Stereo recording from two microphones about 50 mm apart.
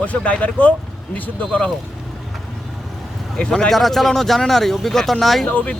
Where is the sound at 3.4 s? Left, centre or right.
Centre.